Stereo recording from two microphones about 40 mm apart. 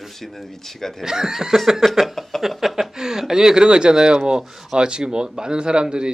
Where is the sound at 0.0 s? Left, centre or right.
Centre.